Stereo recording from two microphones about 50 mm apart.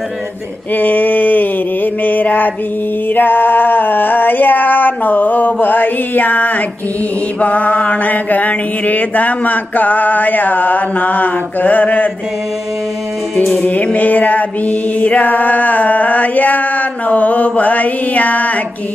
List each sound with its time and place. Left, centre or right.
0.7 s mantra: left
3.2 s a sound: left
13.9 s music: left